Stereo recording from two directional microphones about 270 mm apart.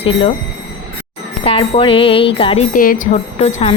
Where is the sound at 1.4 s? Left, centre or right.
Left.